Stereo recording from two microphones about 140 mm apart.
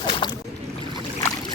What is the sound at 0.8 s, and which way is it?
Boat, 30° left (ahead or behind).